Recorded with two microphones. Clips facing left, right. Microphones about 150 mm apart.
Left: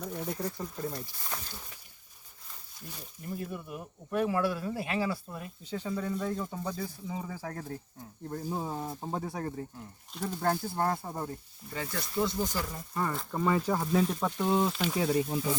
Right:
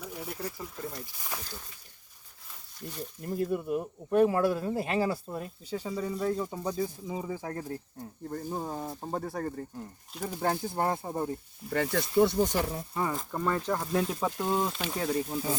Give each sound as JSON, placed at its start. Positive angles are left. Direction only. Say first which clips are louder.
{"t": 0.0, "sound": "speech", "louder": "left 3 dB", "side_deg": -5}
{"t": 3.2, "sound": "speech", "louder": "right 8 dB", "side_deg": -45}
{"t": 5.7, "sound": "speech", "louder": "even", "side_deg": -10}
{"t": 8.3, "sound": "speech", "louder": "even", "side_deg": 0}
{"t": 10.1, "sound": "speech", "louder": "even", "side_deg": -5}
{"t": 11.7, "sound": "speech", "louder": "right 8 dB", "side_deg": -70}
{"t": 12.9, "sound": "speech", "louder": "right 1 dB", "side_deg": -10}
{"t": 14.9, "sound": "speech", "louder": "left 1 dB", "side_deg": 10}